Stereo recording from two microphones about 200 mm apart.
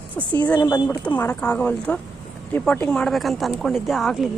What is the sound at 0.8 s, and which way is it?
A woman's voice, 10° left (ahead or behind).